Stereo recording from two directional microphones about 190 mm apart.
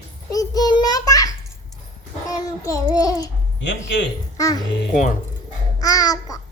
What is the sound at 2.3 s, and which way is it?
Child singing, 15° left (ahead or behind).